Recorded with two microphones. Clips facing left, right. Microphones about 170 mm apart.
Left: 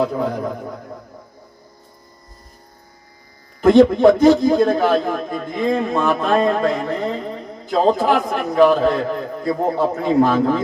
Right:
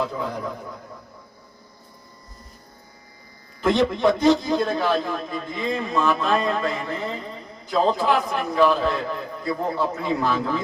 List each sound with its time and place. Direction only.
0.0 s a man's voice: 50° left (ahead or behind)
3.6 s a man's voice: 50° left (ahead or behind)